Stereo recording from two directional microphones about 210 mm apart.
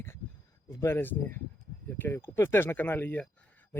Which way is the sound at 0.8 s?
10° left (ahead or behind).